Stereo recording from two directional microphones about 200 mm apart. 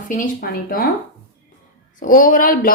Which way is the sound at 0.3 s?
45° left (ahead or behind).